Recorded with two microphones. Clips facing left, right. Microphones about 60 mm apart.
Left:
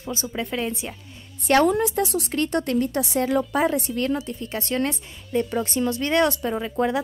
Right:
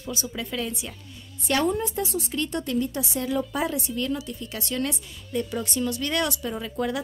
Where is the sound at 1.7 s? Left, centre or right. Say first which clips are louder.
Left 5 dB; left.